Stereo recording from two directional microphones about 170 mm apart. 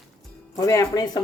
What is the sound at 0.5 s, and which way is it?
Speech, 20° left (ahead or behind).